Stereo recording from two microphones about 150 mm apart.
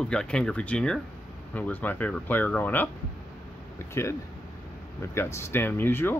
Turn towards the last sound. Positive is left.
turn(degrees=15)  # may be behind; listen again after turning